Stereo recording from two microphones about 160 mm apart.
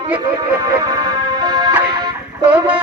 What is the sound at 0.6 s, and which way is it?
Speech, 25° right (ahead or behind).